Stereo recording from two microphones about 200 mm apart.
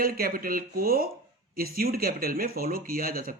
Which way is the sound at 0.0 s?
45° right (ahead or behind).